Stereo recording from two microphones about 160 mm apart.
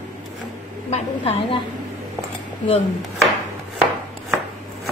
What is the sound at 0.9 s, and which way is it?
Speech, 40° left (ahead or behind).